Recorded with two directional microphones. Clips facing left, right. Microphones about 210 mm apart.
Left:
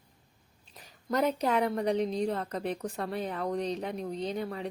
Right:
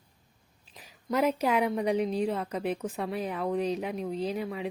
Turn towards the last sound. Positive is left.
turn(degrees=-5)  # may be behind; listen again after turning